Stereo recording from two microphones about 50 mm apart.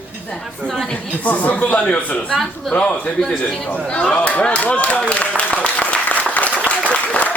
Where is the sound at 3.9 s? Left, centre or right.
Left.